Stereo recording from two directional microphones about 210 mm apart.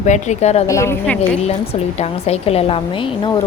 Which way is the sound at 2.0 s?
30° left (ahead or behind).